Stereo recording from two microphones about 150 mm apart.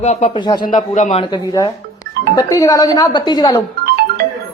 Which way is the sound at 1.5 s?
25° left (ahead or behind).